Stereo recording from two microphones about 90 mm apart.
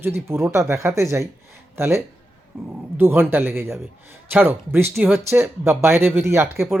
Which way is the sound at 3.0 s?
25° right (ahead or behind).